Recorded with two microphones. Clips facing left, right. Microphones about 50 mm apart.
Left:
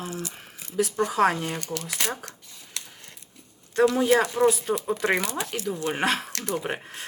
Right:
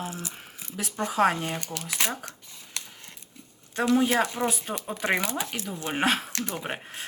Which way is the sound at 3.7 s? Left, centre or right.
Right.